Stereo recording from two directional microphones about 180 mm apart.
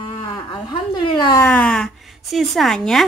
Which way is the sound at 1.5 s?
5° left (ahead or behind).